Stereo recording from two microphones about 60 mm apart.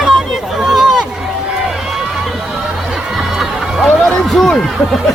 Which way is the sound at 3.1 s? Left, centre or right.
Centre.